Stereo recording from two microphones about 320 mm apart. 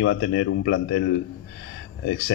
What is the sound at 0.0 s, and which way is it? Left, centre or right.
Speech, left.